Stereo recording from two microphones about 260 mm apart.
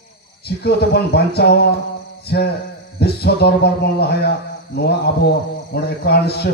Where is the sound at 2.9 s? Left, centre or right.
Left.